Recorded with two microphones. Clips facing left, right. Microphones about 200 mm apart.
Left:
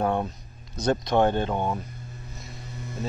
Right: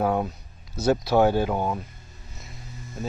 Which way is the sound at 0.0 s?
5° right (ahead or behind).